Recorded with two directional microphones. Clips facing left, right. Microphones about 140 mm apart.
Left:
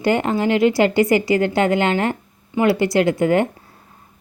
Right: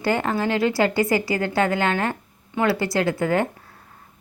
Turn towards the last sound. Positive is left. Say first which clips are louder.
# left 5 dB
turn(degrees=20)  # may be behind; listen again after turning